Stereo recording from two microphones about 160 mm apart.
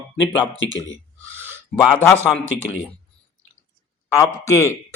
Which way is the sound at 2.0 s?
15° right (ahead or behind).